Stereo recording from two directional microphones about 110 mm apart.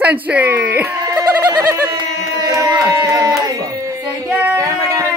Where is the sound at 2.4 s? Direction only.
30° right (ahead or behind).